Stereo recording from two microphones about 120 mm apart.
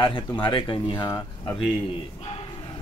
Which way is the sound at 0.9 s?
25° left (ahead or behind).